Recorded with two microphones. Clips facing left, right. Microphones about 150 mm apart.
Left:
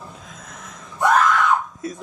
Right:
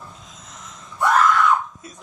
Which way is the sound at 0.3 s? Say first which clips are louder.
Left 3 dB; 55° left (ahead or behind).